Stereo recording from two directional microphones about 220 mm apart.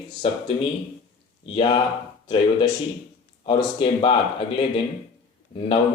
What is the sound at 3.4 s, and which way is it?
Speech, 20° left (ahead or behind).